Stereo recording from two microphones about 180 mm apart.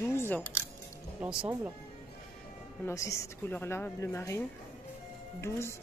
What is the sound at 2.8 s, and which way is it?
Speech, 15° left (ahead or behind).